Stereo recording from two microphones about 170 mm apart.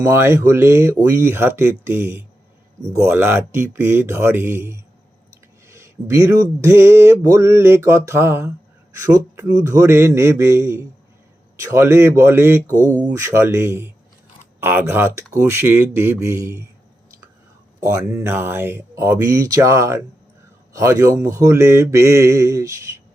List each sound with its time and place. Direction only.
0.0 s speech: 15° right (ahead or behind)
17.7 s speech: 15° right (ahead or behind)